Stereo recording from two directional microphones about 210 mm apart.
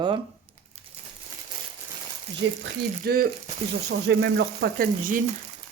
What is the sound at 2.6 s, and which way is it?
Frying, 45° right (ahead or behind).